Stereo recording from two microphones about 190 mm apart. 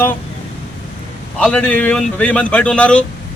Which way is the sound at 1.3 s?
5° left (ahead or behind).